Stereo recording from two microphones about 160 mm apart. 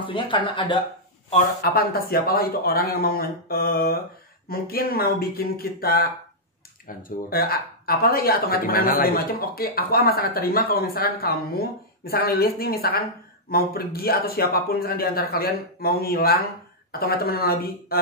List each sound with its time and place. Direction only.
0.0 s speech: 30° left (ahead or behind)
1.6 s speech: 70° left (ahead or behind)